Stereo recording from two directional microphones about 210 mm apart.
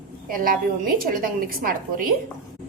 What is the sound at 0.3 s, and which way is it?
A woman's voice, 40° right (ahead or behind).